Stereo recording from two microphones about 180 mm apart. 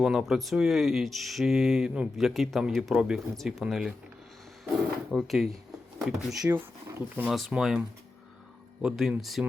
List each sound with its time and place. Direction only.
0.0 s speech: centre (ahead or behind)
5.1 s speech: centre (ahead or behind)
6.4 s speech: 15° right (ahead or behind)
7.3 s speech: centre (ahead or behind)